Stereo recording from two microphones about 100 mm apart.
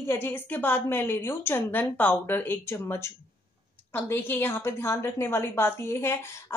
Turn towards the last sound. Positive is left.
turn(degrees=25)  # may be behind; listen again after turning